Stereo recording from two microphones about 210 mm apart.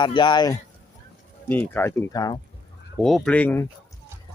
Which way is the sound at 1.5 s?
10° left (ahead or behind).